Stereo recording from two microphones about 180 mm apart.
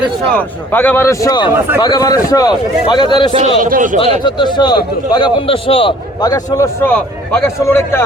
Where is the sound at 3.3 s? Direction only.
35° right (ahead or behind).